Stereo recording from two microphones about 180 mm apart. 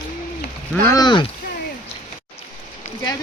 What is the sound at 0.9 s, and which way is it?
Speech, 25° left (ahead or behind).